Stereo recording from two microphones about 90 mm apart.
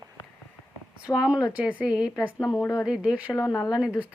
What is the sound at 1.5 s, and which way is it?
Speech, 15° right (ahead or behind).